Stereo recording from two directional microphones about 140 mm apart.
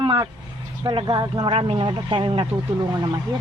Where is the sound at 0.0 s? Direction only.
40° right (ahead or behind).